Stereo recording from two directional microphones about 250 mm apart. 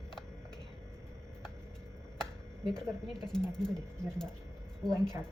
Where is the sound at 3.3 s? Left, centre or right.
Centre.